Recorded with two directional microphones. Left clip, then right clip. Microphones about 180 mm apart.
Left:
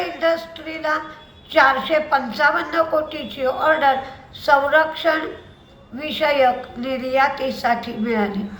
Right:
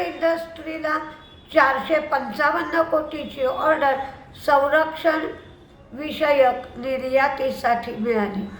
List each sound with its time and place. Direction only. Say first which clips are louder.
0.0 s a woman's voice: left 2 dB; 15° right (ahead or behind)